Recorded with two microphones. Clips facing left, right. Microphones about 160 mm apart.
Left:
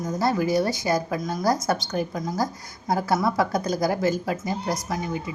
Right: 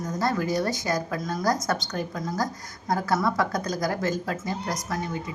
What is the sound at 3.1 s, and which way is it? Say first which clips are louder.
Speech: left 2 dB; 25° left (ahead or behind).